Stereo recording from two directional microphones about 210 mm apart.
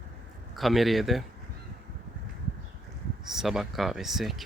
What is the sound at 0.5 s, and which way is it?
Speech, centre (ahead or behind).